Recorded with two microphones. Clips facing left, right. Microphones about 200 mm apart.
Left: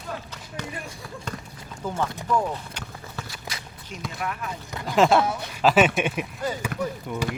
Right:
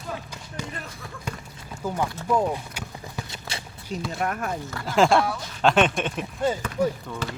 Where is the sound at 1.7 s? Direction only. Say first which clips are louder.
Right 1 dB; 10° right (ahead or behind); by 3.6 s 25° right (ahead or behind).